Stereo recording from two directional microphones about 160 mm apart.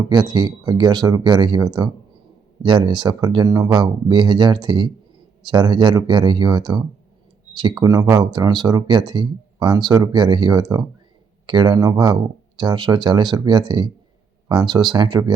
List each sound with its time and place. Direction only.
0.1 s speech: 25° right (ahead or behind)